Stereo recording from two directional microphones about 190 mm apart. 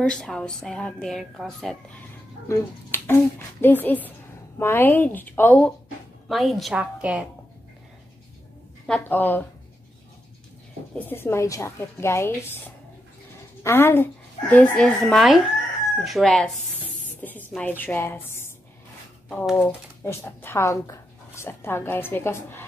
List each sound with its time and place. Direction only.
0.1 s a woman's voice: 5° left (ahead or behind)
2.4 s a woman's voice: 15° left (ahead or behind); by 7.2 s 5° right (ahead or behind)
8.8 s speech: 5° left (ahead or behind)
11.0 s speech: 10° left (ahead or behind)
13.6 s a woman's voice: 10° left (ahead or behind)